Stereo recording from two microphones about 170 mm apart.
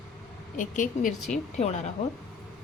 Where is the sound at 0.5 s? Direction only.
50° left (ahead or behind).